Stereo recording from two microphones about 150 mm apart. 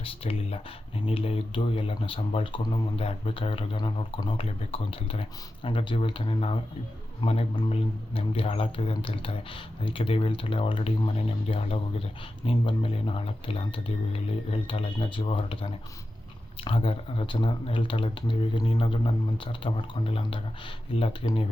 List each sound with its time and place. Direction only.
0.0 s speech: 40° left (ahead or behind)